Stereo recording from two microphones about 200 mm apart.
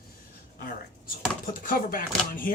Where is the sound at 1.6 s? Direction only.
45° left (ahead or behind).